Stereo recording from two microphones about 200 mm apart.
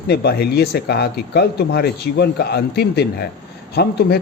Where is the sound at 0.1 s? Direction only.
55° left (ahead or behind).